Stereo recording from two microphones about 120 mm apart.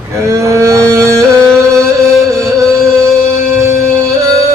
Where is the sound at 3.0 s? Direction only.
25° right (ahead or behind).